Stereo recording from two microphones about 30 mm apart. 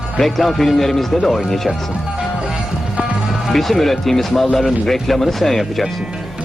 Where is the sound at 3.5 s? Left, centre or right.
Centre.